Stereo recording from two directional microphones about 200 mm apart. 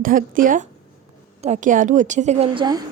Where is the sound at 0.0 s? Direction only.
45° right (ahead or behind).